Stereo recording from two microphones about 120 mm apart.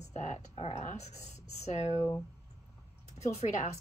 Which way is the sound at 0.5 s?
55° left (ahead or behind).